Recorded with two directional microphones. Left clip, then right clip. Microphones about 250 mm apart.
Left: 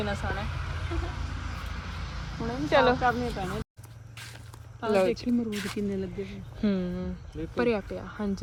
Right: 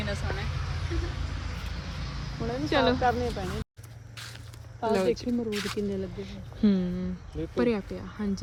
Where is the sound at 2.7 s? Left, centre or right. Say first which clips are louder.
Left 3 dB; centre.